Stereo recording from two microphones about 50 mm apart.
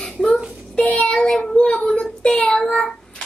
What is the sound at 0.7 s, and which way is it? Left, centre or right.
Child singing, left.